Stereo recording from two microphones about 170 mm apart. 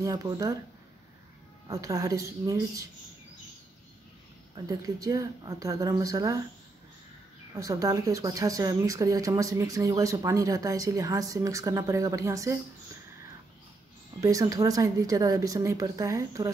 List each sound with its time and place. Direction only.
0.0 s speech: 20° right (ahead or behind)
1.7 s speech: 20° right (ahead or behind)
4.6 s speech: 20° right (ahead or behind)
7.5 s speech: 20° right (ahead or behind)
14.2 s speech: 20° right (ahead or behind)